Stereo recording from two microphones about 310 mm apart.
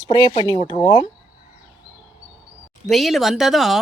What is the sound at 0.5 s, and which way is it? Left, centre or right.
Speech, centre.